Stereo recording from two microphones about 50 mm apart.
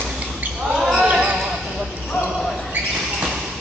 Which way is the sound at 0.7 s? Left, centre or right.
Centre.